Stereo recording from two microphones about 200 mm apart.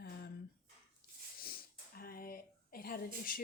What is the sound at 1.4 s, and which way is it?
Speech, 50° left (ahead or behind).